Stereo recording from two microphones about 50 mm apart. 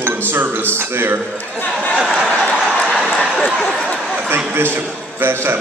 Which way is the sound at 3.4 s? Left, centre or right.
Left.